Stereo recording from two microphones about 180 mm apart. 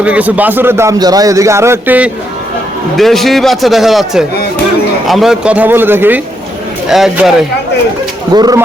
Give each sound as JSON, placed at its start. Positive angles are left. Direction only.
{"t": 0.0, "sound": "a man's voice", "side_deg": -10}
{"t": 3.0, "sound": "a man's voice", "side_deg": 0}
{"t": 8.3, "sound": "speech", "side_deg": -20}